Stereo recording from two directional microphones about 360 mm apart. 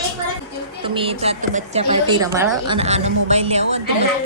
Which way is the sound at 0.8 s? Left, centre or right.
Centre.